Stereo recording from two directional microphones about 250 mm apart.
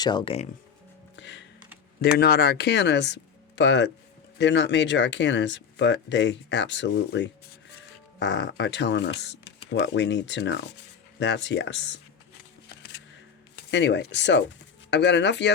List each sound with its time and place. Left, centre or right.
0.0 s speech: centre
1.1 s music: left
2.1 s speech: left
13.7 s speech: left